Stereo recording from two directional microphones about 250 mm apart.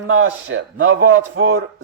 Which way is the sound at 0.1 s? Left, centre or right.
Right.